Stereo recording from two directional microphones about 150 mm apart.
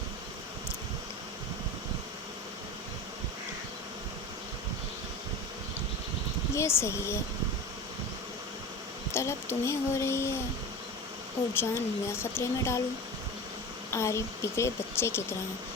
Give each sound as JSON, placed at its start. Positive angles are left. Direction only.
{"t": 6.5, "sound": "speech", "side_deg": 15}
{"t": 9.1, "sound": "speech", "side_deg": 15}
{"t": 11.5, "sound": "speech", "side_deg": 15}
{"t": 13.9, "sound": "speech", "side_deg": 20}